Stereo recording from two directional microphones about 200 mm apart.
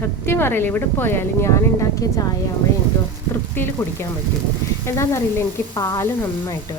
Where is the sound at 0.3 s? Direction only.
10° left (ahead or behind).